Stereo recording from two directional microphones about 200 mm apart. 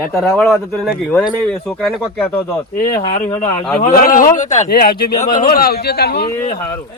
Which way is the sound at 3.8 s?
45° left (ahead or behind).